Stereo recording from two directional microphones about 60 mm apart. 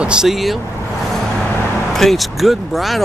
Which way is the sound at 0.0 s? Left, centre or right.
Centre.